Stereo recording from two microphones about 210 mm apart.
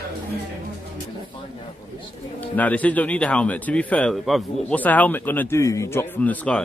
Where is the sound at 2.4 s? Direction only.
5° left (ahead or behind).